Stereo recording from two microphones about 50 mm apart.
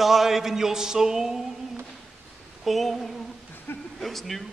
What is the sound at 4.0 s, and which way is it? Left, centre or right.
Speech, centre.